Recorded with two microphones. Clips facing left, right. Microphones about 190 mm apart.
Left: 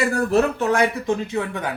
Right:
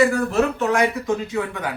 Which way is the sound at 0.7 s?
30° left (ahead or behind).